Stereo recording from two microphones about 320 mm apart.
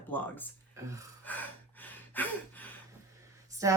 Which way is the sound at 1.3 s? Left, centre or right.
Centre.